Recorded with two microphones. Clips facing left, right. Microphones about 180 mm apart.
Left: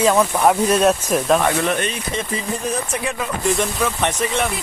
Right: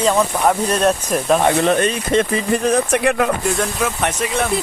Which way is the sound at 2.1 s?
70° right (ahead or behind).